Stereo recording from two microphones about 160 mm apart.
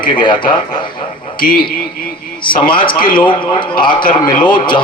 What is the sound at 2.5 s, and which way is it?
A man's voice, 30° left (ahead or behind).